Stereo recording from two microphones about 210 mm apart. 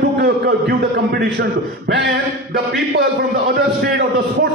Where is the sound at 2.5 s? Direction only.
50° right (ahead or behind).